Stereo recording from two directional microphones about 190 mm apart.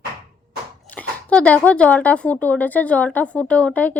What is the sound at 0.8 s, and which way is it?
A woman's voice, 5° left (ahead or behind).